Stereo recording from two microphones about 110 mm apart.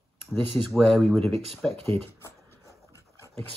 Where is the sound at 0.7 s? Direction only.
5° left (ahead or behind).